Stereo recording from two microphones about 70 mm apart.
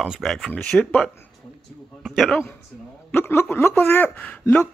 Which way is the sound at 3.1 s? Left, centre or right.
Left.